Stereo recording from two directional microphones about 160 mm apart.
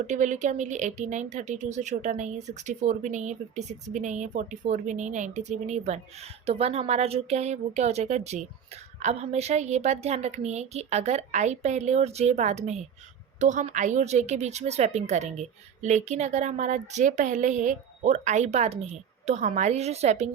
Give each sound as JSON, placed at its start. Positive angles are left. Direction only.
{"t": 0.1, "sound": "speech", "side_deg": -50}